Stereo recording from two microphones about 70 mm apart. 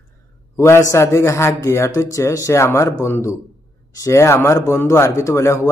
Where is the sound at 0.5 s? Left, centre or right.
Left.